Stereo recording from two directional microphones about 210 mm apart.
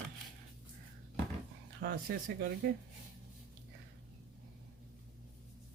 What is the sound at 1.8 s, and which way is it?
Speech, 50° right (ahead or behind).